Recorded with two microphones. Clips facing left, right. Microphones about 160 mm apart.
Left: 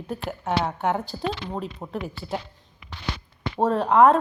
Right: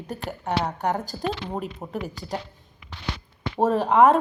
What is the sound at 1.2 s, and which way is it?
Speech, 15° right (ahead or behind).